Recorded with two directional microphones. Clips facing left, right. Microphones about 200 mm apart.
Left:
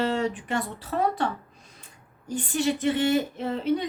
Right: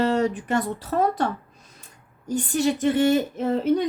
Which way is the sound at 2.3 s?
40° right (ahead or behind).